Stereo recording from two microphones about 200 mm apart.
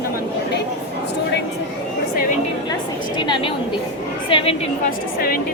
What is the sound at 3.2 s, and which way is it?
Speech, 25° left (ahead or behind).